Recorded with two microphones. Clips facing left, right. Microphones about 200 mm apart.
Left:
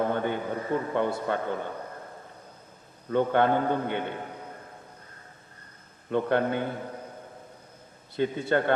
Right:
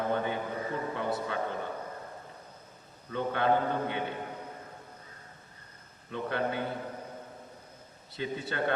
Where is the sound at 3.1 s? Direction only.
55° left (ahead or behind).